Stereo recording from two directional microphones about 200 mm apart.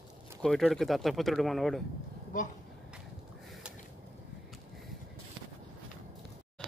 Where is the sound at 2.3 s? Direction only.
40° left (ahead or behind).